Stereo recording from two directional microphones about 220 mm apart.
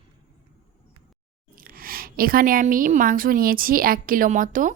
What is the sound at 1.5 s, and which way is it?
A woman's voice, 40° right (ahead or behind).